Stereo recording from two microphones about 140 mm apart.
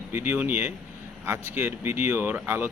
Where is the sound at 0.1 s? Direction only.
15° right (ahead or behind).